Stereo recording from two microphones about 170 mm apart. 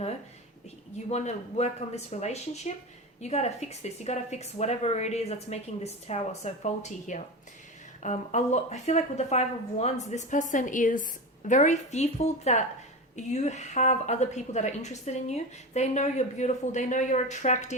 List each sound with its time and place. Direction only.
1.1 s a woman's voice: 40° left (ahead or behind)